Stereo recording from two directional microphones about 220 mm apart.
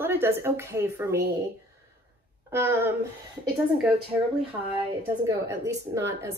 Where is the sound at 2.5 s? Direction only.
10° right (ahead or behind).